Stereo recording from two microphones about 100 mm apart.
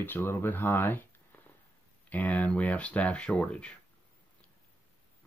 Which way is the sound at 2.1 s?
15° left (ahead or behind).